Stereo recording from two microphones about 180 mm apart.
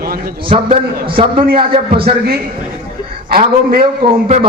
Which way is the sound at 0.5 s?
35° right (ahead or behind).